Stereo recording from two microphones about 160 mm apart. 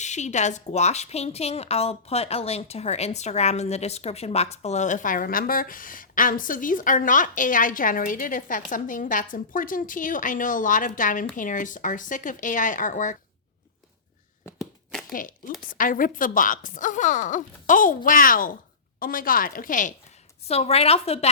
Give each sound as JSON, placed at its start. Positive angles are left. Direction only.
{"t": 0.0, "sound": "a woman's voice", "side_deg": 45}
{"t": 15.1, "sound": "speech", "side_deg": 60}
{"t": 20.5, "sound": "a woman's voice", "side_deg": 40}